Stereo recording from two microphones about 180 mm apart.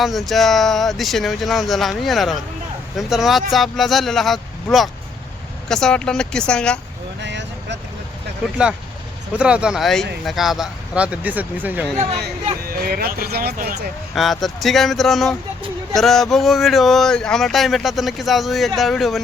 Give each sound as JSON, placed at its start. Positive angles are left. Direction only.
{"t": 0.0, "sound": "speech", "side_deg": 0}
{"t": 7.2, "sound": "vehicle", "side_deg": -75}
{"t": 9.4, "sound": "speech", "side_deg": -5}
{"t": 12.6, "sound": "speech", "side_deg": -55}
{"t": 14.2, "sound": "speech", "side_deg": 0}